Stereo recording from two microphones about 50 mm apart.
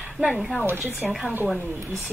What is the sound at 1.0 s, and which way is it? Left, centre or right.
Speech, centre.